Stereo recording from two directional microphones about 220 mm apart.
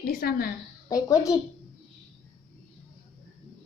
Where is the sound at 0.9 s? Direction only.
15° left (ahead or behind).